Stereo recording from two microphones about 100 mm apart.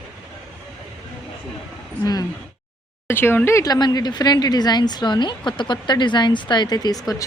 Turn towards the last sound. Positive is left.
turn(degrees=40)  # may be behind; listen again after turning